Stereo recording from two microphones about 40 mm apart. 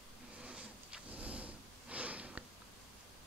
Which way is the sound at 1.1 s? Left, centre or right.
Right.